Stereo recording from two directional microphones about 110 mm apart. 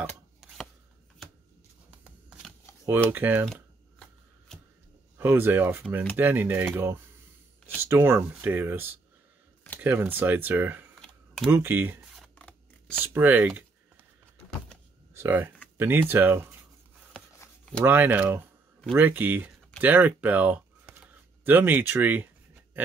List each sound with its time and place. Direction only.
0.4 s chopping: centre (ahead or behind)
1.9 s shuffling cards: 10° right (ahead or behind)
3.1 s speech: 15° right (ahead or behind)
5.1 s speech: 20° right (ahead or behind)
11.0 s camera: 5° left (ahead or behind)
11.5 s speech: 20° right (ahead or behind)
12.2 s scissors: 10° left (ahead or behind)
13.0 s speech: 15° right (ahead or behind)
15.1 s speech: 20° right (ahead or behind)
17.8 s speech: 20° right (ahead or behind)